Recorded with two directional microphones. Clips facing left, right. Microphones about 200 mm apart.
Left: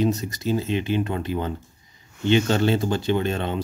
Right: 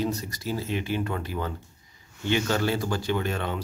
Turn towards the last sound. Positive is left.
turn(degrees=25)  # may be behind; listen again after turning